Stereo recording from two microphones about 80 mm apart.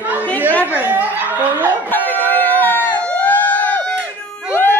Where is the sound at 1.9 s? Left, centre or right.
Left.